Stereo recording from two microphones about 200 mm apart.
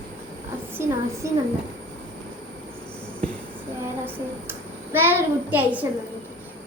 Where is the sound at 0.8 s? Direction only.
10° right (ahead or behind).